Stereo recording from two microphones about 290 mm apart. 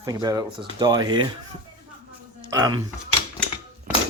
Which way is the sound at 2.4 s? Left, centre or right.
Centre.